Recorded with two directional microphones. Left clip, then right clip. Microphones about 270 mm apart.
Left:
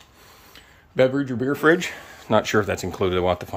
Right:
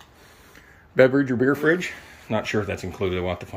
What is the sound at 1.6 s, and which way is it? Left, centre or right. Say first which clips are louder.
Speech: left 3 dB; centre.